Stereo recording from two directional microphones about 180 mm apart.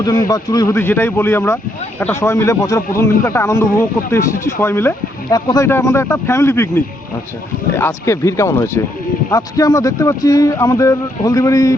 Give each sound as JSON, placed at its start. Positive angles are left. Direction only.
{"t": 0.0, "sound": "a man's voice", "side_deg": 20}